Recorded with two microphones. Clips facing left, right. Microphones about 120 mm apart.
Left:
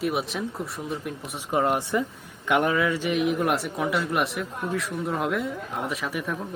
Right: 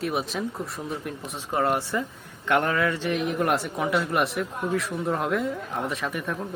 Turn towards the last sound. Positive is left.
turn(degrees=5)  # may be behind; listen again after turning